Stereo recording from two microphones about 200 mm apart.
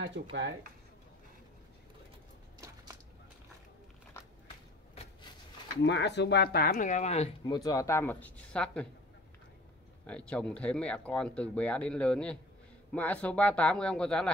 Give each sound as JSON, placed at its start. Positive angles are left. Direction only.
{"t": 0.0, "sound": "speech", "side_deg": -65}
{"t": 5.8, "sound": "speech", "side_deg": 60}
{"t": 10.0, "sound": "speech", "side_deg": 5}